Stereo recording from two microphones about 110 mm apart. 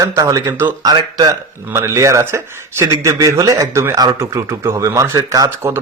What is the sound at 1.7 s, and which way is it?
Speech, 25° right (ahead or behind).